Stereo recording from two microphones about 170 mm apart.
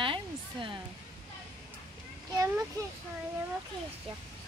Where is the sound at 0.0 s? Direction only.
30° right (ahead or behind).